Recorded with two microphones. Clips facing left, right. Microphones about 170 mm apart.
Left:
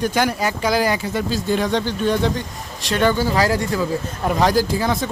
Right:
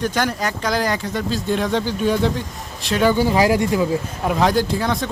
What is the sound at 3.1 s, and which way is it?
Speech, 15° right (ahead or behind).